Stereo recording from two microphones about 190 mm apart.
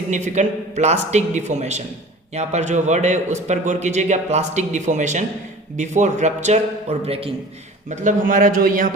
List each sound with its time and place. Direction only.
0.1 s a man's voice: 40° right (ahead or behind)